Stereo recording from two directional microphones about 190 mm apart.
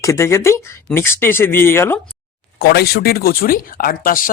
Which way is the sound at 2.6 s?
55° left (ahead or behind).